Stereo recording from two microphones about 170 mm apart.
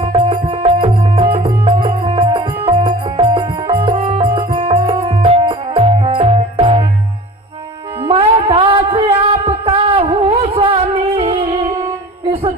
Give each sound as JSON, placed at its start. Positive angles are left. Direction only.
{"t": 0.0, "sound": "music", "side_deg": -30}
{"t": 8.0, "sound": "a sound", "side_deg": -30}
{"t": 11.6, "sound": "music", "side_deg": -15}
{"t": 12.2, "sound": "music", "side_deg": -30}